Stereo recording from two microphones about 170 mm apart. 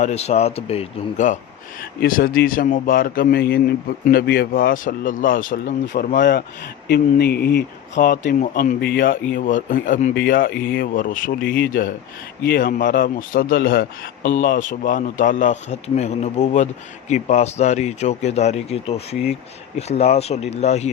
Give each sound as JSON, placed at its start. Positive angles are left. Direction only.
{"t": 0.0, "sound": "speech", "side_deg": 40}
{"t": 1.8, "sound": "a man's voice", "side_deg": 55}
{"t": 6.8, "sound": "speech", "side_deg": 65}
{"t": 7.9, "sound": "a man's voice", "side_deg": 55}
{"t": 11.3, "sound": "a man's voice", "side_deg": 65}